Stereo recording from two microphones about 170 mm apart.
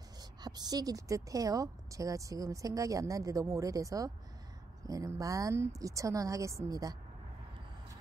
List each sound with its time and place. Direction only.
0.2 s a woman's voice: 25° right (ahead or behind)